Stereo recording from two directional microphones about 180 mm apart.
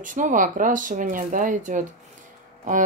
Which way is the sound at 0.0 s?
45° right (ahead or behind).